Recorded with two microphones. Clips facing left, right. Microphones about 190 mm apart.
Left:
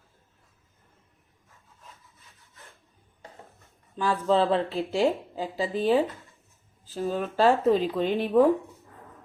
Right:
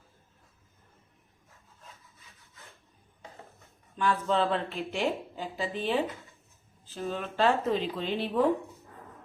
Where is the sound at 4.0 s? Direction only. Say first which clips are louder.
Left 4 dB; 35° left (ahead or behind).